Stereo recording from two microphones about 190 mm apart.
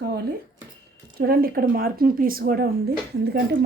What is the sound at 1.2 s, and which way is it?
Speech, 50° right (ahead or behind).